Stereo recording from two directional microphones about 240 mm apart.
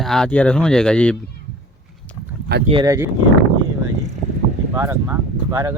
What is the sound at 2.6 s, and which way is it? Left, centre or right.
Speech, centre.